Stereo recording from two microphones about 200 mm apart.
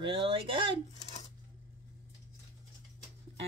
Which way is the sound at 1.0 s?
35° left (ahead or behind).